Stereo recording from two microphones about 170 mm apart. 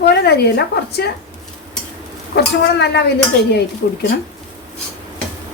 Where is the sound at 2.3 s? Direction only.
85° left.